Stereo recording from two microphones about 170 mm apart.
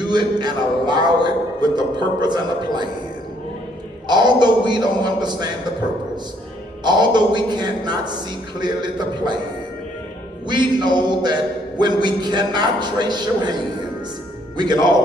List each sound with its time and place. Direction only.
0.1 s a man's voice: 25° right (ahead or behind)
4.1 s a man's voice: 25° right (ahead or behind)
6.8 s a man's voice: 25° right (ahead or behind)
10.5 s a man's voice: 25° right (ahead or behind)
14.6 s a man's voice: 25° right (ahead or behind)